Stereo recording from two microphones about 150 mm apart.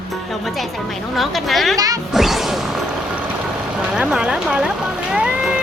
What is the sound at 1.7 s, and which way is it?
Music, 25° right (ahead or behind).